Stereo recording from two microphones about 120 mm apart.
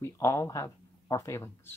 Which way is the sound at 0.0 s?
25° left (ahead or behind).